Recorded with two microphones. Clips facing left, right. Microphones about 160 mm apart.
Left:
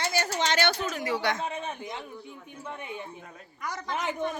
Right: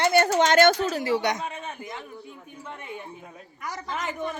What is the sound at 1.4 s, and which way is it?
Speech, 25° left (ahead or behind).